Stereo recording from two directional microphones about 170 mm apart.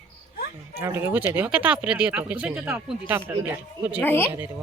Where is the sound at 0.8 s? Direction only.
15° right (ahead or behind).